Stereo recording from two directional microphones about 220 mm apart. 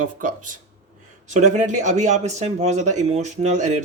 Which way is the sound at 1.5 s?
35° right (ahead or behind).